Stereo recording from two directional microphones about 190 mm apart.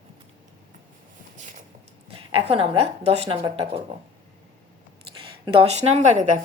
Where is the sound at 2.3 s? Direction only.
30° right (ahead or behind).